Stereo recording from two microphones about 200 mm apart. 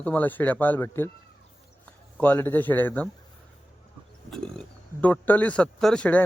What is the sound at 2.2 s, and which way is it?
Speech, 10° left (ahead or behind).